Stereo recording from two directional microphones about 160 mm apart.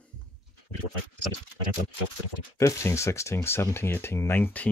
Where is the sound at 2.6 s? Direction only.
20° left (ahead or behind).